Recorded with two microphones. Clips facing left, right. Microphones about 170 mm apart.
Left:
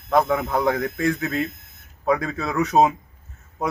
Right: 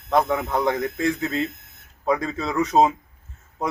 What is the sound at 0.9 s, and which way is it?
Speech, 25° right (ahead or behind).